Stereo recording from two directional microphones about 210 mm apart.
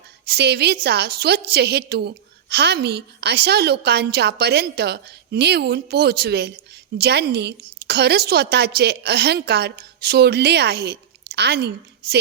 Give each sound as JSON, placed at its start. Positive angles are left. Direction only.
{"t": 0.3, "sound": "a woman's voice", "side_deg": -50}